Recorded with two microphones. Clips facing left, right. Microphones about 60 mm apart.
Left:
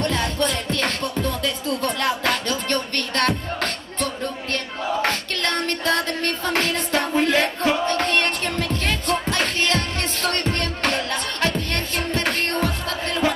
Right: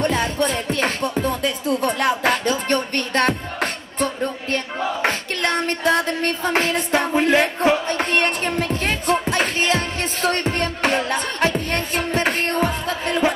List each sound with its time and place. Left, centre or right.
0.0 s music: centre